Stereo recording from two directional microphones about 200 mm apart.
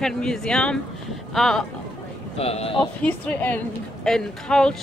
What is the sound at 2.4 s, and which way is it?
Speech, 30° left (ahead or behind).